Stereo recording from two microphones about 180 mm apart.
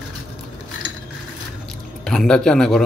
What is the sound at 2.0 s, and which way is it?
Speech, 5° left (ahead or behind).